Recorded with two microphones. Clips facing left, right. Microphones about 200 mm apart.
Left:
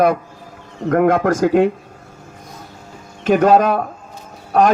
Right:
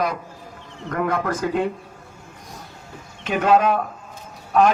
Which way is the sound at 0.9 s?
75° left (ahead or behind).